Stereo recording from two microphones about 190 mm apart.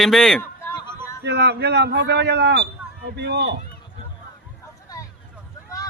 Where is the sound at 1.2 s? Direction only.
65° right (ahead or behind).